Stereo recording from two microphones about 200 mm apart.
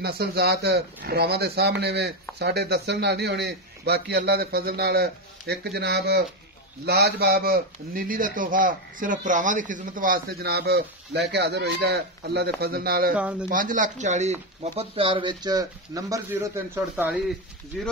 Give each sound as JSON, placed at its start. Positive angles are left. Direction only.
{"t": 0.0, "sound": "a man's voice", "side_deg": -55}
{"t": 13.1, "sound": "speech", "side_deg": -5}
{"t": 13.5, "sound": "speech", "side_deg": -40}